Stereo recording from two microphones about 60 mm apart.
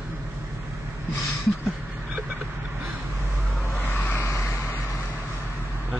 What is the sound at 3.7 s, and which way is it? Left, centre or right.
Vehicle, left.